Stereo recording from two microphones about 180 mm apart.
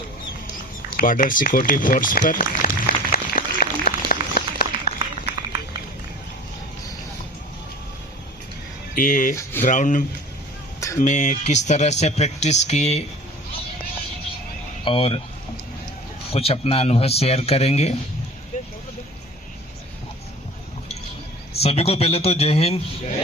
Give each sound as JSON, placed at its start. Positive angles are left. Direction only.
{"t": 0.9, "sound": "run", "side_deg": 50}
{"t": 9.0, "sound": "speech", "side_deg": 45}
{"t": 9.3, "sound": "speech", "side_deg": 15}
{"t": 9.6, "sound": "speech", "side_deg": 45}
{"t": 10.8, "sound": "a sound", "side_deg": 15}
{"t": 11.0, "sound": "speech", "side_deg": 45}
{"t": 14.8, "sound": "speech", "side_deg": 30}
{"t": 16.3, "sound": "speech", "side_deg": 35}
{"t": 18.5, "sound": "a sound", "side_deg": 45}
{"t": 21.6, "sound": "speech", "side_deg": 35}